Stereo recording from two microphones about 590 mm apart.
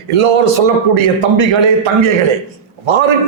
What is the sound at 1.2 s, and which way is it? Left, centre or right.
Speech, right.